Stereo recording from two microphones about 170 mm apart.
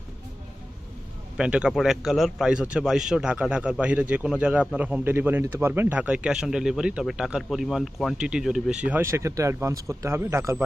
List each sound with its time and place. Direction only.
1.4 s speech: 5° right (ahead or behind)